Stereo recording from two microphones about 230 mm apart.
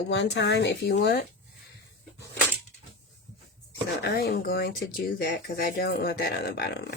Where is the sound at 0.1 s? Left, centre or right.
Left.